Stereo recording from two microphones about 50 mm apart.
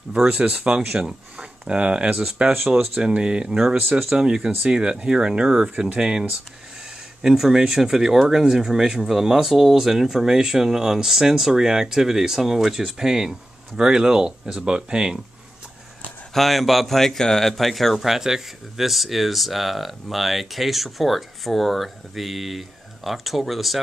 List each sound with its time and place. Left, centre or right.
0.1 s speech: centre
0.4 s speech: right
0.7 s speech: centre
16.3 s speech: centre